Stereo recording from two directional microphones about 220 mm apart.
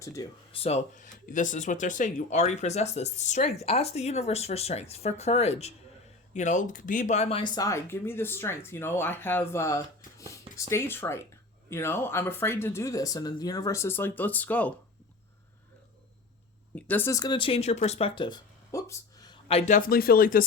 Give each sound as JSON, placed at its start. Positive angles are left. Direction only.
{"t": 0.0, "sound": "speech", "side_deg": 15}
{"t": 0.5, "sound": "speech", "side_deg": 30}
{"t": 16.7, "sound": "speech", "side_deg": 5}